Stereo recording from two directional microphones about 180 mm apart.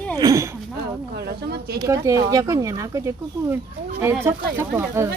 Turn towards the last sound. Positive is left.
turn(degrees=-15)  # may be behind; listen again after turning